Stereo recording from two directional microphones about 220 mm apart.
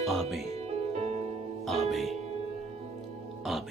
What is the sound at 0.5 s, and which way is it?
Music, 30° right (ahead or behind).